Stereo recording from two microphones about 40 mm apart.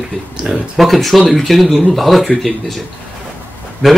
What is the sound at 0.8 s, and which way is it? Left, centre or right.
Speech, centre.